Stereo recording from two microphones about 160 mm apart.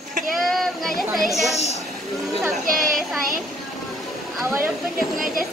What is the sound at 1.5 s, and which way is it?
Speech, 40° left (ahead or behind).